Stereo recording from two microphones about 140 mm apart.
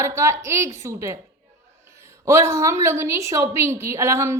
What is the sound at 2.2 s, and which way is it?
A woman's voice, 20° right (ahead or behind).